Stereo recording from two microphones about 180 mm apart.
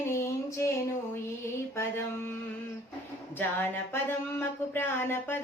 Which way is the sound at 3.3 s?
10° left (ahead or behind).